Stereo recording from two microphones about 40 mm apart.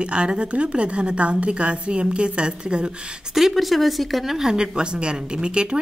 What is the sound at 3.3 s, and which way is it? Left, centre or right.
A woman's voice, centre.